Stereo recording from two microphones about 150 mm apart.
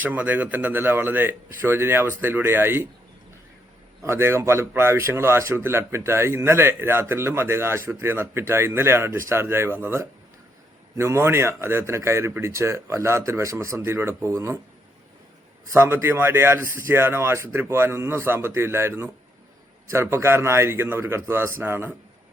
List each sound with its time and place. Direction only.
0.0 s a man's voice: 10° right (ahead or behind)
4.0 s a man's voice: 15° right (ahead or behind)
15.7 s a man's voice: 15° right (ahead or behind)